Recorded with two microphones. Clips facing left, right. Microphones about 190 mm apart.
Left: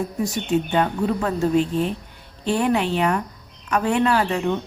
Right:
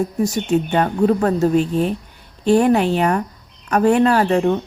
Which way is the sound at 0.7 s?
45° right (ahead or behind).